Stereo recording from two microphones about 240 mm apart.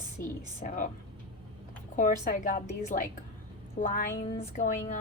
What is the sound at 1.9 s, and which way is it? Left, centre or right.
Speech, left.